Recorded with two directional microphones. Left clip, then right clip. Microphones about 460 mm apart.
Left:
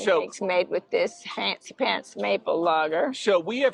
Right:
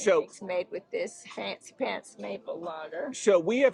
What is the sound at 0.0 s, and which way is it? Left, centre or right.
Speech, centre.